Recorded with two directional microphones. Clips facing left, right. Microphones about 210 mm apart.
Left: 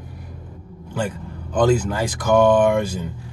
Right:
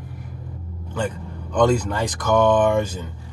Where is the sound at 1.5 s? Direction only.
5° left (ahead or behind).